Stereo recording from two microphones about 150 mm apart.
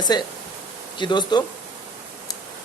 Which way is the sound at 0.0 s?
30° left (ahead or behind).